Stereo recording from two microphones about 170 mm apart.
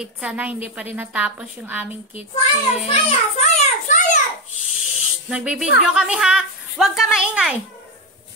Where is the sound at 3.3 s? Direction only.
40° left (ahead or behind).